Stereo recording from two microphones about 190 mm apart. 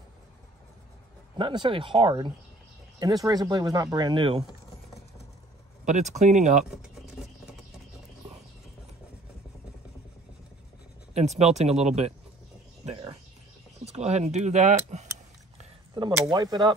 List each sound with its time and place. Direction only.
1.4 s speech: 25° right (ahead or behind)
5.9 s speech: 40° right (ahead or behind)
6.6 s speech: centre (ahead or behind)
11.1 s speech: 35° right (ahead or behind)
16.2 s speech: 20° right (ahead or behind)